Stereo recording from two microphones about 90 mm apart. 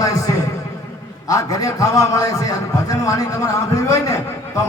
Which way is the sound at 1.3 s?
40° left (ahead or behind).